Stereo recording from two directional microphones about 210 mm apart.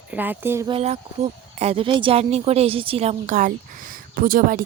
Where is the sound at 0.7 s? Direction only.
30° right (ahead or behind).